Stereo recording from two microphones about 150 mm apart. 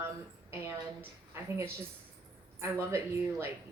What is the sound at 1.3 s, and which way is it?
Speech, 15° right (ahead or behind).